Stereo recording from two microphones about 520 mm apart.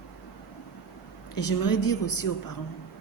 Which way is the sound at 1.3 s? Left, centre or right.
Left.